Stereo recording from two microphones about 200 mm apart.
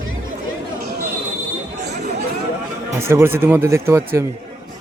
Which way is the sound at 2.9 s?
15° right (ahead or behind).